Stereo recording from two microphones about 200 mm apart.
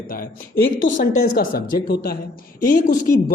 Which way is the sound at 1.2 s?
50° left (ahead or behind).